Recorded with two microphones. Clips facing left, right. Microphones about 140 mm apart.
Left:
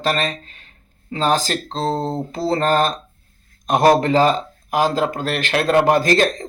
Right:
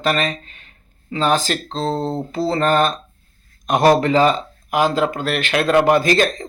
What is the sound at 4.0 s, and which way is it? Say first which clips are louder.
Speech: even; 40° left (ahead or behind).